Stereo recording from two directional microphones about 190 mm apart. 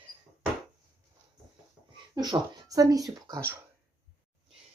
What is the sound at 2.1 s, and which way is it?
Speech, 20° right (ahead or behind).